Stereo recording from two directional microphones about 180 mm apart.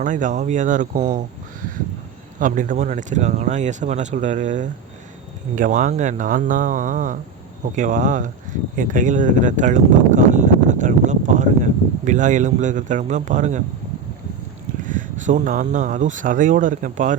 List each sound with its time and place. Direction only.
0.0 s speech: 45° right (ahead or behind)
2.4 s speech: 45° right (ahead or behind)
14.8 s speech: 45° right (ahead or behind)